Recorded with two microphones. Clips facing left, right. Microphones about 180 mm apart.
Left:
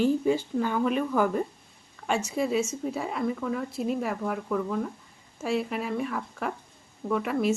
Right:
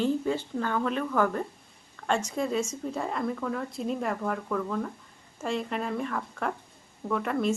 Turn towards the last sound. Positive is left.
turn(degrees=5)  # may be behind; listen again after turning